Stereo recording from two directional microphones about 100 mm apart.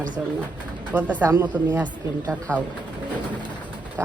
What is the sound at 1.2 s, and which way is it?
Speech, 25° right (ahead or behind).